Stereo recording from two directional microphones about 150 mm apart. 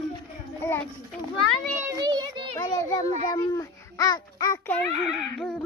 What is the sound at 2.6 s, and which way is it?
A child's voice, 20° left (ahead or behind).